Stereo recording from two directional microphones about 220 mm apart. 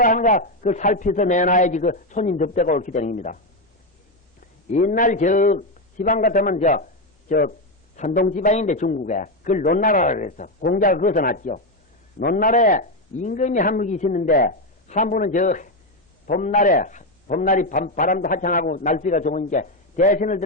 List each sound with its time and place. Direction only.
0.0 s a man's voice: 35° left (ahead or behind)